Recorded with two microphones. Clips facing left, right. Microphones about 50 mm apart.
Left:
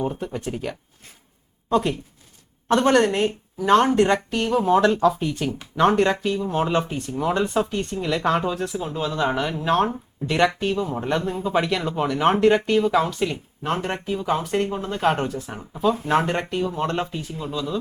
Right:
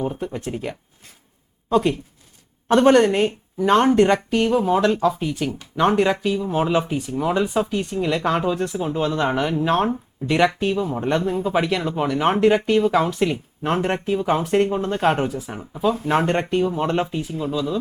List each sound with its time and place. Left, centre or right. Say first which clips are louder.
0.0 s speech: right 1 dB; centre